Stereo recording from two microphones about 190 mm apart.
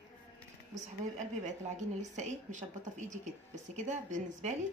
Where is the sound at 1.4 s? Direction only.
40° right (ahead or behind).